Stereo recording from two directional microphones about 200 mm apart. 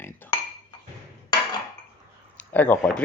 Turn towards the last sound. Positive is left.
turn(degrees=5)  # may be behind; listen again after turning